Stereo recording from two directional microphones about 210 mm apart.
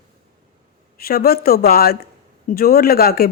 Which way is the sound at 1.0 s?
45° left (ahead or behind).